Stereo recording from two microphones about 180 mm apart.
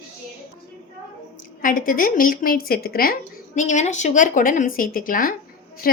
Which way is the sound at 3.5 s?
40° left (ahead or behind).